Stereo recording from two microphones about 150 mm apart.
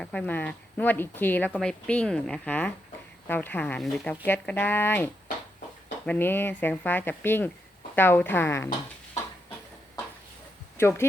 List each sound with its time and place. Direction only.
0.0 s speech: 10° left (ahead or behind)
10.8 s speech: 15° left (ahead or behind)